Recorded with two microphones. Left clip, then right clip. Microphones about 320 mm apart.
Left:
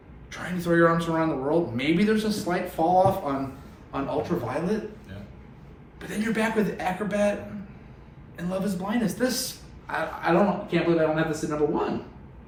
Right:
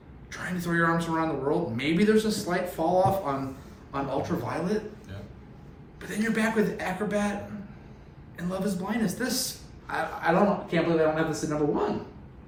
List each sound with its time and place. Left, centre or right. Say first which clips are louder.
0.3 s a man's voice: left 5 dB; centre
6.0 s speech: left 1 dB; centre
8.4 s speech: left 2 dB; centre